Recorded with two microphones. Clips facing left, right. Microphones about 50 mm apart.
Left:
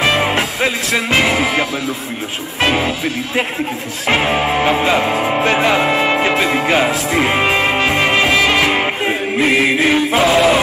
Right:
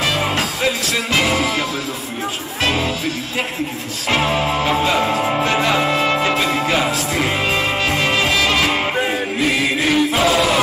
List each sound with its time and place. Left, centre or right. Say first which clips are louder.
0.0 s music: left 4 dB; left
4.1 s music: left 3 dB; left